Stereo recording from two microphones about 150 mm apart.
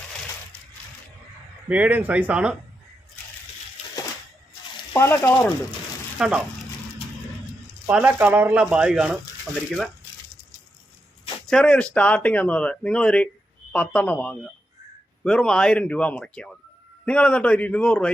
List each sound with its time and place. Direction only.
1.7 s speech: 10° right (ahead or behind)
4.9 s speech: 15° left (ahead or behind)
6.1 s speech: 5° right (ahead or behind)
7.9 s speech: 10° right (ahead or behind)
11.4 s speech: 5° left (ahead or behind)